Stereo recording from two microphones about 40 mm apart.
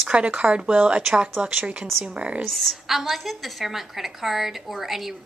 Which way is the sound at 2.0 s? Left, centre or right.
Right.